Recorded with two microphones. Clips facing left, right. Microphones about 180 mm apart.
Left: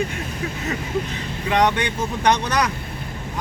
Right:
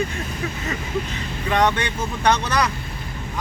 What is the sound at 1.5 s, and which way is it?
Speech, 15° left (ahead or behind).